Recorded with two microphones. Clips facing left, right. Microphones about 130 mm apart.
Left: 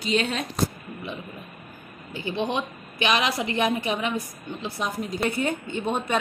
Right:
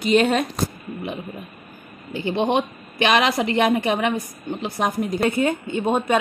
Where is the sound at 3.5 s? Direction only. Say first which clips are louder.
Right 5 dB; 60° right (ahead or behind).